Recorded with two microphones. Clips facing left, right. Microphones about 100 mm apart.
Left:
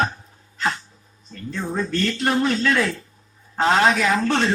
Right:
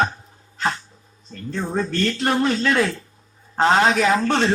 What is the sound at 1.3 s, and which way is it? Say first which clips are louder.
Speech: right 2 dB; 35° right (ahead or behind).